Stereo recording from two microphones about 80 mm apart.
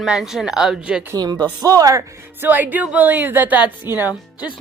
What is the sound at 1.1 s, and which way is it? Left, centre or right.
Speech, right.